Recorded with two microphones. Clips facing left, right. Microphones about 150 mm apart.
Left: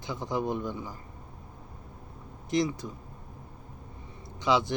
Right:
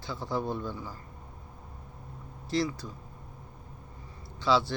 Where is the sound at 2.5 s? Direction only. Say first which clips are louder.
Left 2 dB; 20° left (ahead or behind).